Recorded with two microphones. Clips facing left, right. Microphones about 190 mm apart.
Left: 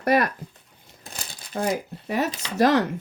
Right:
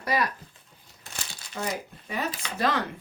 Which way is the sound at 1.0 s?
35° left (ahead or behind).